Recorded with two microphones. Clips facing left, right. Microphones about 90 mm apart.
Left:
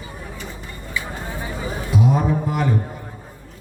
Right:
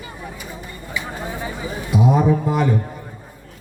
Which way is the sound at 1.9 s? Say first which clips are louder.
Right 3 dB; 20° right (ahead or behind).